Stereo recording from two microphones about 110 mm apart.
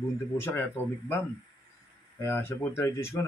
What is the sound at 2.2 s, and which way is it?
A man's voice, 20° left (ahead or behind).